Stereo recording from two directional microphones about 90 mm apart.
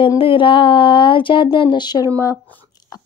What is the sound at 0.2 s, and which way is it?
Speech, 70° left (ahead or behind).